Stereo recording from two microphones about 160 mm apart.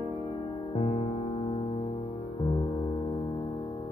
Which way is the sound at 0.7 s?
35° left (ahead or behind).